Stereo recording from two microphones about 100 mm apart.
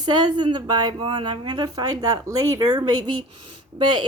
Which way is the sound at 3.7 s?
50° right (ahead or behind).